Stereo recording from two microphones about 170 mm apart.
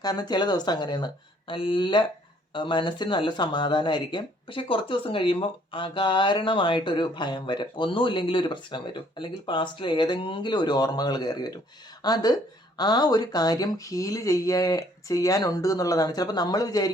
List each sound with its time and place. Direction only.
0.0 s speech: 25° left (ahead or behind)